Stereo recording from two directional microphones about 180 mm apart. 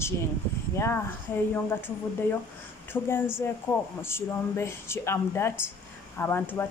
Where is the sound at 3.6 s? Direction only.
15° left (ahead or behind).